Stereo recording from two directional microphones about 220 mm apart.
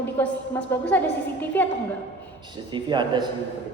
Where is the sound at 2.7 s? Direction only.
20° right (ahead or behind).